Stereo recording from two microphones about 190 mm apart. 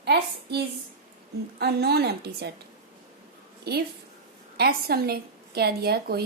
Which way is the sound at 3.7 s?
55° right (ahead or behind).